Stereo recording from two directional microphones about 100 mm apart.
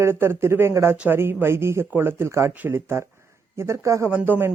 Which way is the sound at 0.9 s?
15° right (ahead or behind).